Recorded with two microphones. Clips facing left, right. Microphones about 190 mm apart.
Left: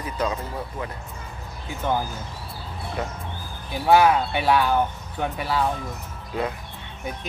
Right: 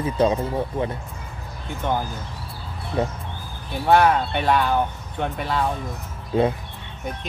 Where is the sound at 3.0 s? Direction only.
25° right (ahead or behind).